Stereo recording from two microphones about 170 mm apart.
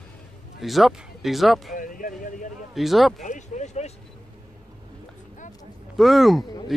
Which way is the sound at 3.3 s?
45° left (ahead or behind).